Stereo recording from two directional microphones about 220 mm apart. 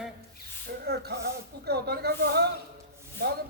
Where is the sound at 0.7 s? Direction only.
45° right (ahead or behind).